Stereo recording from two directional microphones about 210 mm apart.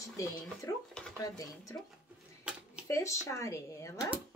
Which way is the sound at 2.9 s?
15° left (ahead or behind).